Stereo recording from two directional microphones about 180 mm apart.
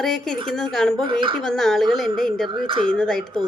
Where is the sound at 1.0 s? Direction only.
30° right (ahead or behind).